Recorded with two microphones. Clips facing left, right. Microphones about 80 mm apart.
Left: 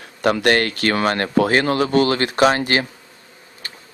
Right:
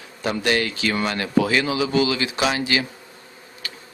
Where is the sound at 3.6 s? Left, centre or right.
Left.